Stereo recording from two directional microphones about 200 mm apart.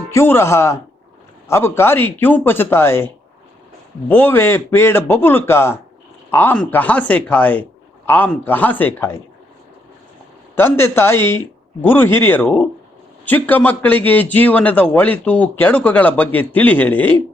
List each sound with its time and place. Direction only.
0.1 s a man's voice: 10° left (ahead or behind)
4.1 s a man's voice: 10° left (ahead or behind)
10.5 s a man's voice: 10° left (ahead or behind)